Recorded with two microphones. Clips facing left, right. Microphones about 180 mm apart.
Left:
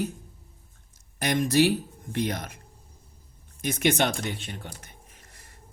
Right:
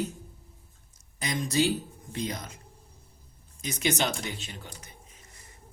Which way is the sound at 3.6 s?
55° left (ahead or behind).